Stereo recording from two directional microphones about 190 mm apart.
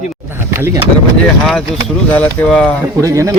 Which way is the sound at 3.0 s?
15° right (ahead or behind).